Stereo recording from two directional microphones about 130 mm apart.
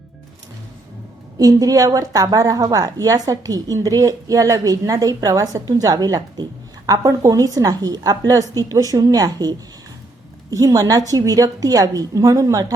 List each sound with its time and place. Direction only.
1.4 s a woman's voice: 30° right (ahead or behind)